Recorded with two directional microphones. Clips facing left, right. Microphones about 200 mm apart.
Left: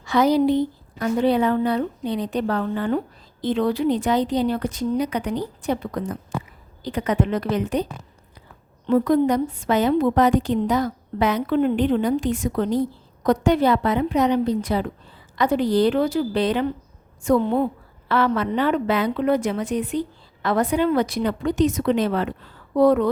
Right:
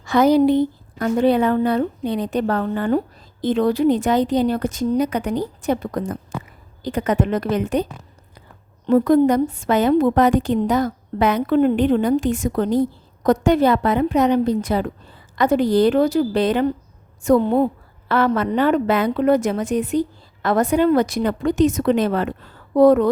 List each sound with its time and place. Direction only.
0.0 s a woman's voice: 50° right (ahead or behind)
8.9 s a woman's voice: 45° right (ahead or behind)